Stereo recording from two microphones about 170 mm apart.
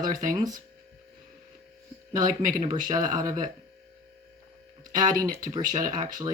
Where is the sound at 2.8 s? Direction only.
20° right (ahead or behind).